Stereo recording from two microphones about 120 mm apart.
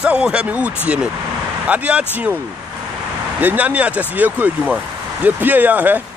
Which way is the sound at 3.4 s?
15° right (ahead or behind).